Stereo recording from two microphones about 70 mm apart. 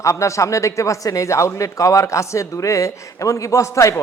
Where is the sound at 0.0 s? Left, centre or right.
Left.